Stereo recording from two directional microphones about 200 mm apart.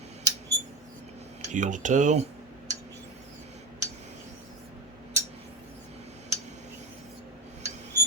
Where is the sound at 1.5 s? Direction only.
40° right (ahead or behind).